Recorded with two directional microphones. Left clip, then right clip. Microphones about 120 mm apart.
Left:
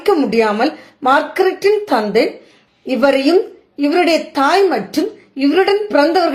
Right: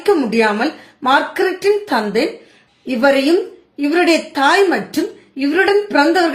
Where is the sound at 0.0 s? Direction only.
30° left (ahead or behind).